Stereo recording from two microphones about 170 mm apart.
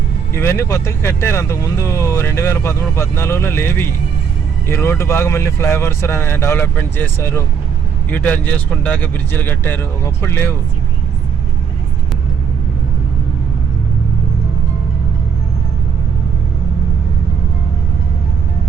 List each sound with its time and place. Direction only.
0.3 s speech: 15° left (ahead or behind)